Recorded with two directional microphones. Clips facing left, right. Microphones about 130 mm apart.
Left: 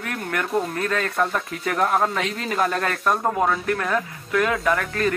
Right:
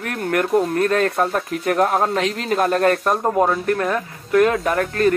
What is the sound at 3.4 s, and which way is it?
Speech, 30° right (ahead or behind).